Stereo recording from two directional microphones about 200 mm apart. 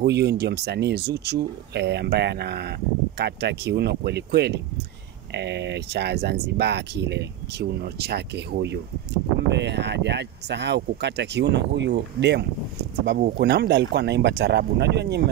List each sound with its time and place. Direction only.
0.0 s speech: 55° right (ahead or behind)